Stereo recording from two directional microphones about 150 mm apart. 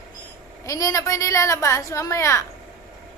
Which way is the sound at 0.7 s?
20° left (ahead or behind).